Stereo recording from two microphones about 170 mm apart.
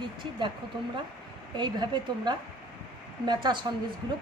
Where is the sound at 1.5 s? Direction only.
25° right (ahead or behind).